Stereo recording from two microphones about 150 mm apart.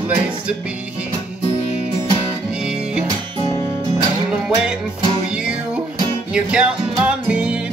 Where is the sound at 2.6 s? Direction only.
5° right (ahead or behind).